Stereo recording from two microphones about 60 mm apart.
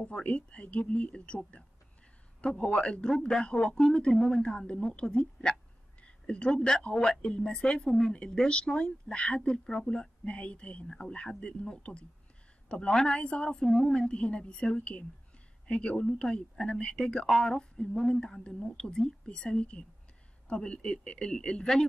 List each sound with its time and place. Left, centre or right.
0.0 s speech: centre
2.4 s speech: left